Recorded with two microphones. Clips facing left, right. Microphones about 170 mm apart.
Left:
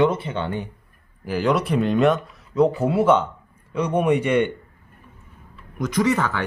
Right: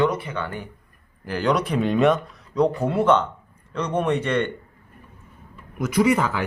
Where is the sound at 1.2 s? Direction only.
5° left (ahead or behind).